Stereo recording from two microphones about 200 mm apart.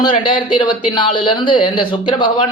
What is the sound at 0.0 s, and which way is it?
Speech, 25° left (ahead or behind).